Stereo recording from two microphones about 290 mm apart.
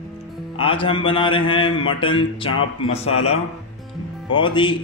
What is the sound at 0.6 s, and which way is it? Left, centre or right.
A man's voice, centre.